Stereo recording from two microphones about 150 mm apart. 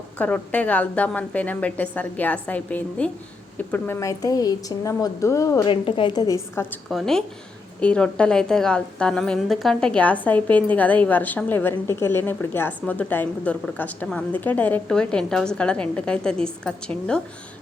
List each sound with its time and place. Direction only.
0.2 s a woman's voice: 10° left (ahead or behind)
5.6 s a woman's voice: 35° left (ahead or behind); by 6.7 s 20° left (ahead or behind)
6.9 s a woman's voice: 5° left (ahead or behind)